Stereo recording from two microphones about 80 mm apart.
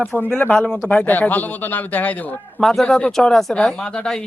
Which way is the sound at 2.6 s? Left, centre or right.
Centre.